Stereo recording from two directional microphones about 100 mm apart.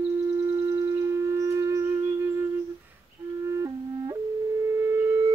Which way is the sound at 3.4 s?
30° right (ahead or behind).